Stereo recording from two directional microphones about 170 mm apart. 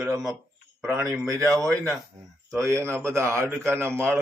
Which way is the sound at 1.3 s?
20° right (ahead or behind).